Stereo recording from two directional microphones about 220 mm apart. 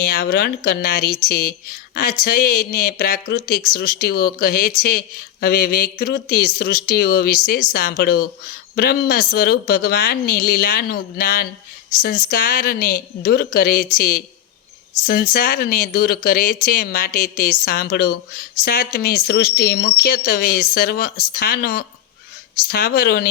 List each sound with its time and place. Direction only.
0.0 s speech: 45° left (ahead or behind)